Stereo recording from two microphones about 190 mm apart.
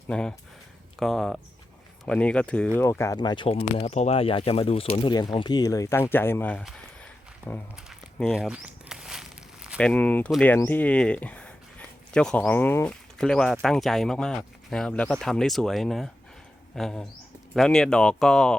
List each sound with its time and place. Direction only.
0.1 s speech: 5° left (ahead or behind)
7.8 s walk: centre (ahead or behind)
9.9 s speech: 10° left (ahead or behind)